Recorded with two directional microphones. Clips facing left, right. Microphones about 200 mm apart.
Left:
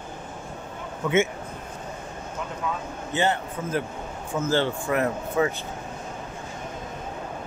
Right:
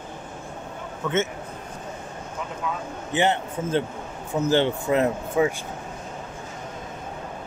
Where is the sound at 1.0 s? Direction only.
10° left (ahead or behind).